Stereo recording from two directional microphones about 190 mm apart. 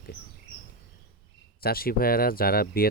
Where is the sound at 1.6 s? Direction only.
50° left (ahead or behind).